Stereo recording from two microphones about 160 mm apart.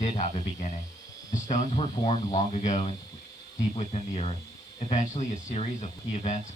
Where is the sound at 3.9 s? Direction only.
40° left (ahead or behind).